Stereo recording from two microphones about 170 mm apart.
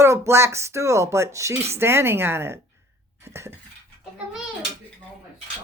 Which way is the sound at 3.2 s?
15° right (ahead or behind).